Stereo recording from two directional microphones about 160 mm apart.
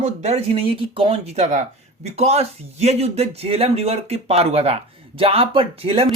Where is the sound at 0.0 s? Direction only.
40° right (ahead or behind).